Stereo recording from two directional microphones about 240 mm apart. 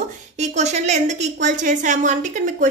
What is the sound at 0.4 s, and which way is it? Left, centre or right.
A woman's voice, right.